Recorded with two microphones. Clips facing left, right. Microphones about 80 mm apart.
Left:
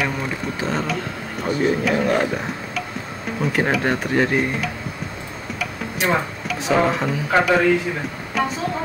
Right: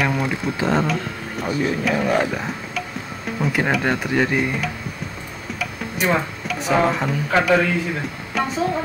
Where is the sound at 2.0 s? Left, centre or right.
Centre.